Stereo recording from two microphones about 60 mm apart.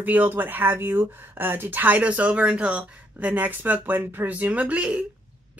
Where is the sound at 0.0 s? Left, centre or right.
Right.